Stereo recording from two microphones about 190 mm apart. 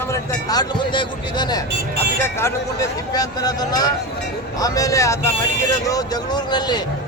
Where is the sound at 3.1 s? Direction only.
20° left (ahead or behind).